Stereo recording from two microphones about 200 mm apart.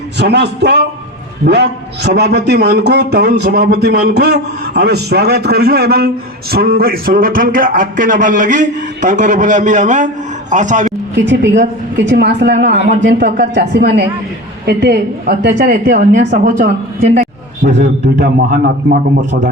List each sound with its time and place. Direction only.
0.2 s a man's voice: 60° right (ahead or behind); by 10.8 s 40° right (ahead or behind)
11.3 s a woman's voice: 60° right (ahead or behind)
17.7 s speech: 65° right (ahead or behind)
18.5 s a woman's voice: 45° right (ahead or behind)